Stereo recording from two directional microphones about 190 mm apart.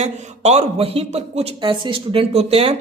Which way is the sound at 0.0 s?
35° right (ahead or behind).